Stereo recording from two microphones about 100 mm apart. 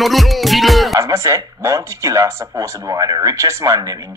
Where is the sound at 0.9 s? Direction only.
35° right (ahead or behind).